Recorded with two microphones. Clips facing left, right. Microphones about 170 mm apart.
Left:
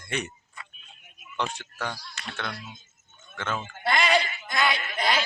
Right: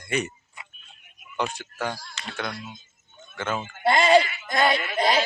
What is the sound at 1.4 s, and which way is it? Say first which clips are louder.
Speech: right 3 dB; 10° right (ahead or behind).